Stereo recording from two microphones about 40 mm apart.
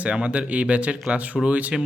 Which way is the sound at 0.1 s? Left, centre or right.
Right.